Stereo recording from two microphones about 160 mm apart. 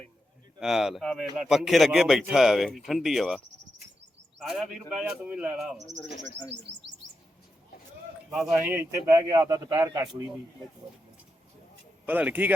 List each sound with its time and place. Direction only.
0.6 s a man's voice: centre (ahead or behind)
4.4 s a man's voice: centre (ahead or behind)
5.7 s speech: 45° right (ahead or behind)
8.5 s a man's voice: 15° right (ahead or behind)
12.0 s speech: 10° right (ahead or behind)